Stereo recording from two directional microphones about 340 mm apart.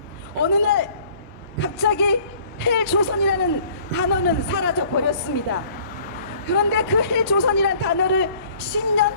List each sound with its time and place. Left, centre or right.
0.4 s a man's voice: left
6.5 s a man's voice: left